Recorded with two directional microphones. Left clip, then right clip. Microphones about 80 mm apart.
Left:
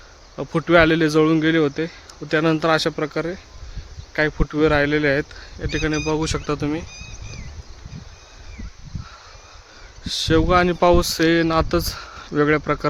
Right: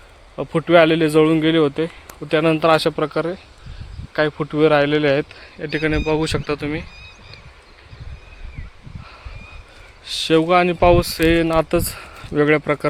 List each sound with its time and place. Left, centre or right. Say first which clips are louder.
0.3 s speech: right 2 dB; left
2.6 s speech: right 4 dB; centre
4.1 s speech: right 2 dB; centre
10.0 s speech: right 2 dB; centre